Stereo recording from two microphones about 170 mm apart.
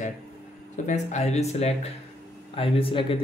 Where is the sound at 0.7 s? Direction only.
45° left (ahead or behind).